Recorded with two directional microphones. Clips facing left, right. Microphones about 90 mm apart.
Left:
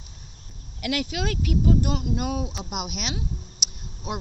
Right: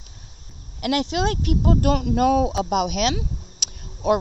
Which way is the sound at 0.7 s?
40° right (ahead or behind).